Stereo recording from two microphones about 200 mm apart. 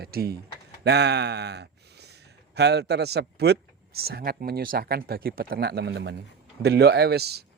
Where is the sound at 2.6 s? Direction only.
55° right (ahead or behind).